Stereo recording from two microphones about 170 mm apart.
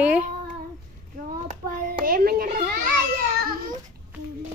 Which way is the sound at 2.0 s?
60° right (ahead or behind).